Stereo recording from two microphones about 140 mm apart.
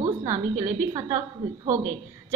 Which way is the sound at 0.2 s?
20° right (ahead or behind).